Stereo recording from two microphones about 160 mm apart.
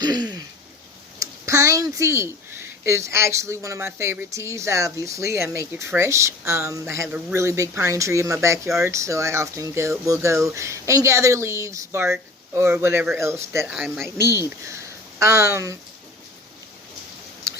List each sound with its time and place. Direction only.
0.0 s throat clearing: 25° right (ahead or behind)
1.2 s speech: 20° right (ahead or behind)
13.7 s speech: centre (ahead or behind)
14.6 s speech: 20° right (ahead or behind)